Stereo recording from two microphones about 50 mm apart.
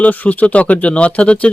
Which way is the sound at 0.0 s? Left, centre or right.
Left.